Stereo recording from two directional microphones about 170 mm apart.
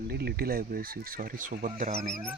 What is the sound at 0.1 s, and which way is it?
Speech, 65° right (ahead or behind).